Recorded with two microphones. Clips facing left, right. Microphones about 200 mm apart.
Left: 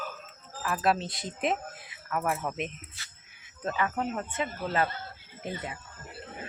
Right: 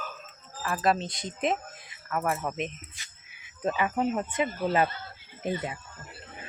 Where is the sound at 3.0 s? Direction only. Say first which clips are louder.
Left 1 dB; 15° right (ahead or behind).